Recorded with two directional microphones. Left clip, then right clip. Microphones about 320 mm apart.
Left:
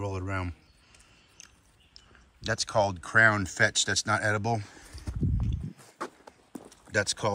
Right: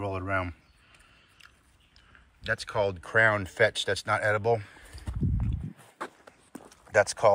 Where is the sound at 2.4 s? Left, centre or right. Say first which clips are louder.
Left 1 dB; centre.